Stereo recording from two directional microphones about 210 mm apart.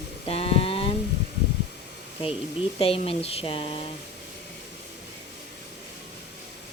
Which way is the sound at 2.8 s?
25° left (ahead or behind).